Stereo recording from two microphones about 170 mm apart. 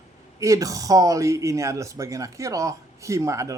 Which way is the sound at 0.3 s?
20° right (ahead or behind).